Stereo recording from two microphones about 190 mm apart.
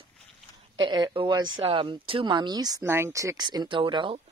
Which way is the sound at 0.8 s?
25° right (ahead or behind).